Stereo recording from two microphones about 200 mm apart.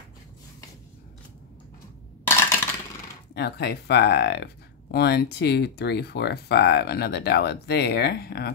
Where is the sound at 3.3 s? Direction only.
55° left (ahead or behind).